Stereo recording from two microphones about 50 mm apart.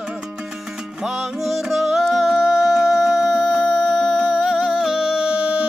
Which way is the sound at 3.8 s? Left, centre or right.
Centre.